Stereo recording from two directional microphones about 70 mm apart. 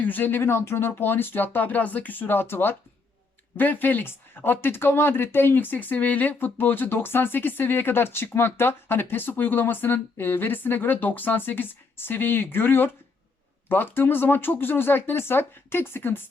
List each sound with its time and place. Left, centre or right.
0.0 s speech: left